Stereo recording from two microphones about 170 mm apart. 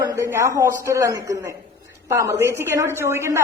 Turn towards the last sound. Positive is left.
turn(degrees=-15)  # may be behind; listen again after turning